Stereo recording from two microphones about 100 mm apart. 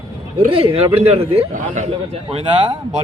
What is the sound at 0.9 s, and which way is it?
Speech, 90° right.